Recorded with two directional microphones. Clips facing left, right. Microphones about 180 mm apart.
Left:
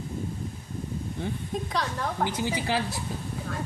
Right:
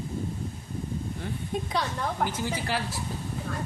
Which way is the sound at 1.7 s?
Centre (ahead or behind).